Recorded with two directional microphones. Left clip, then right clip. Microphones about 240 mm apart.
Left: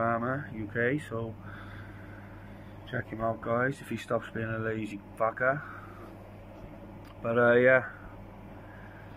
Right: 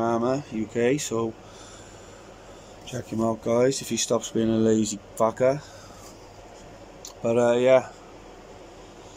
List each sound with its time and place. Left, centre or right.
0.0 s speech: centre
2.9 s speech: centre
7.2 s speech: centre